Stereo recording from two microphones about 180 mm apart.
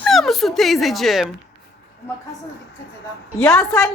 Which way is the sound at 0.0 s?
Centre (ahead or behind).